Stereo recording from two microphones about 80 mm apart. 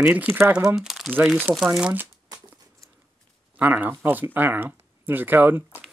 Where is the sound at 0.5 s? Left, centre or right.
Centre.